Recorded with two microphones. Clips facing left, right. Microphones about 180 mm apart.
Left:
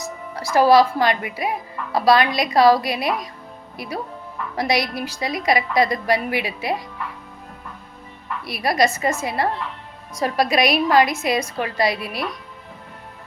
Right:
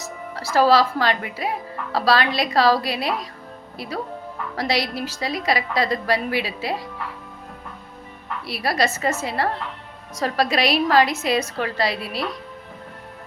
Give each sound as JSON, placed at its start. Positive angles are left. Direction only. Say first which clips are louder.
{"t": 0.0, "sound": "speech", "louder": "left 2 dB", "side_deg": 15}
{"t": 8.4, "sound": "speech", "louder": "left 3 dB", "side_deg": 15}